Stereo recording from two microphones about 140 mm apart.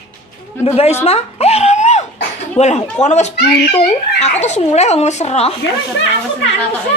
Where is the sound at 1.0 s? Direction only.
50° left (ahead or behind).